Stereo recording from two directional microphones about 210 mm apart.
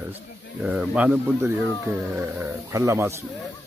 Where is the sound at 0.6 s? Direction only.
5° right (ahead or behind).